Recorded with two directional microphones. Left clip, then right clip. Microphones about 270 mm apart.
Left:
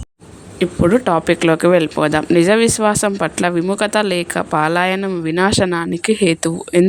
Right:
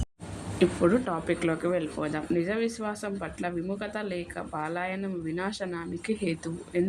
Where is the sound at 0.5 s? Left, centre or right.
Left.